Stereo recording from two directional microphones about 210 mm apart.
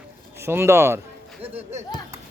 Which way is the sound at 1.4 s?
30° right (ahead or behind).